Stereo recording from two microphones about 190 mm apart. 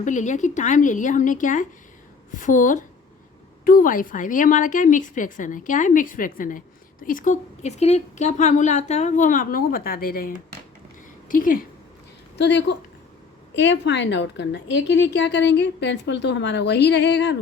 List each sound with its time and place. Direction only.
0.0 s a woman's voice: 40° left (ahead or behind)
12.4 s a woman's voice: 65° left (ahead or behind)